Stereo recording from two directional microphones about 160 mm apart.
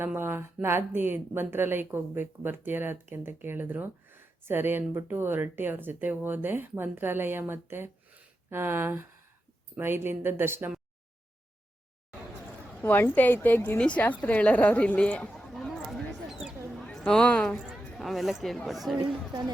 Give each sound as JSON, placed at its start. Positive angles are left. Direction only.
{"t": 0.0, "sound": "speech", "side_deg": -15}
{"t": 12.8, "sound": "a woman's voice", "side_deg": 15}
{"t": 18.9, "sound": "speech", "side_deg": -25}